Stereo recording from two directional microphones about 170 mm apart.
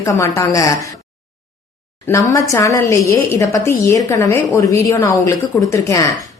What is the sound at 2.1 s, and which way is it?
A woman's voice, 20° left (ahead or behind).